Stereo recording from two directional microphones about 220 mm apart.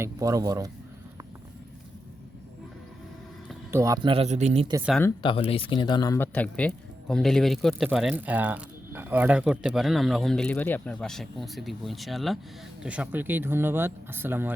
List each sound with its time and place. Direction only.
0.0 s speech: 15° right (ahead or behind)
3.7 s a man's voice: 15° right (ahead or behind); by 4.6 s 30° right (ahead or behind)
5.0 s speech: 20° left (ahead or behind); by 14.5 s 10° right (ahead or behind)